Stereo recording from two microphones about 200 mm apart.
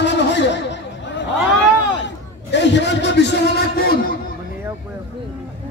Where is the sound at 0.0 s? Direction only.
60° left (ahead or behind).